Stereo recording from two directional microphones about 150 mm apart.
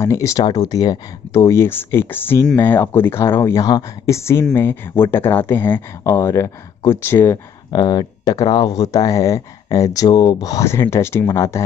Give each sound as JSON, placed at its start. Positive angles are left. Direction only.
{"t": 0.0, "sound": "speech", "side_deg": 20}